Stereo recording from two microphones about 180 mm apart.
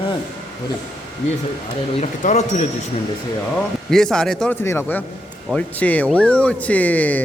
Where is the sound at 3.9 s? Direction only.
Centre (ahead or behind).